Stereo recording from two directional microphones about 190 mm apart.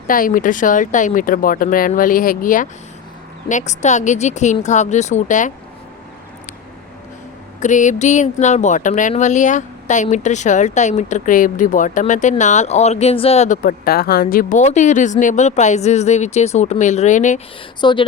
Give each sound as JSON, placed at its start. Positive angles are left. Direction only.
{"t": 0.1, "sound": "speech", "side_deg": 45}
{"t": 7.6, "sound": "speech", "side_deg": 40}
{"t": 17.7, "sound": "speech", "side_deg": 25}